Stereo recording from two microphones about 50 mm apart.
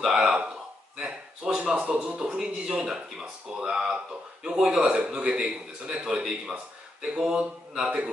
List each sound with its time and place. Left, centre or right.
0.0 s a sound: centre
1.6 s speech: right
2.1 s speech: centre
4.9 s speech: right